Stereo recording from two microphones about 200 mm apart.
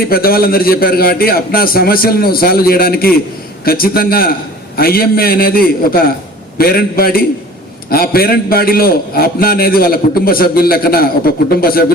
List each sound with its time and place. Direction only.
0.1 s a man's voice: 50° left (ahead or behind)